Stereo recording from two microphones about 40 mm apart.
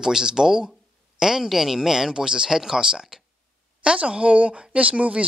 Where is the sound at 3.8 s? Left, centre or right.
Right.